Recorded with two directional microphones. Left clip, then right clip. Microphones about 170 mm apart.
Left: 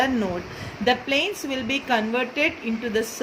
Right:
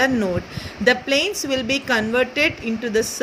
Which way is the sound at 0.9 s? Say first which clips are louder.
Right 4 dB; 50° right (ahead or behind).